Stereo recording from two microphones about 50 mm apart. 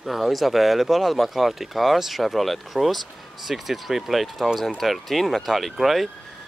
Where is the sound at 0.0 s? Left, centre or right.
Centre.